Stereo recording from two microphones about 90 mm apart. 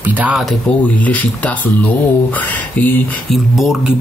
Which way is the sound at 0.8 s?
15° left (ahead or behind).